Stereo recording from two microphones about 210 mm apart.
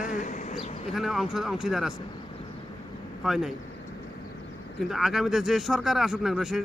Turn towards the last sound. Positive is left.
turn(degrees=0)  # may be behind; listen again after turning